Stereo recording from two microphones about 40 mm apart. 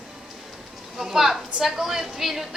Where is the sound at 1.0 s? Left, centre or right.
Centre.